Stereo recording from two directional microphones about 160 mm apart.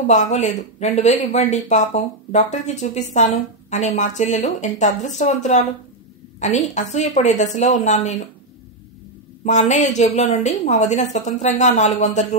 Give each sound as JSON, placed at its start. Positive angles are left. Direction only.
{"t": 0.0, "sound": "speech", "side_deg": 50}
{"t": 9.4, "sound": "speech", "side_deg": 50}